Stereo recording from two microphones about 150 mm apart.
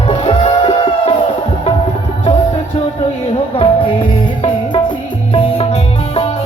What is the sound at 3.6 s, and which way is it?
Music, 35° left (ahead or behind).